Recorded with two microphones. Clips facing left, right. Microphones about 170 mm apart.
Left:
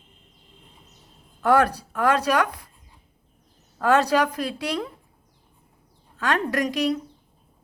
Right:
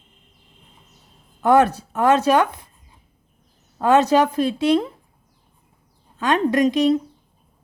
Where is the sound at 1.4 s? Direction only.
20° right (ahead or behind).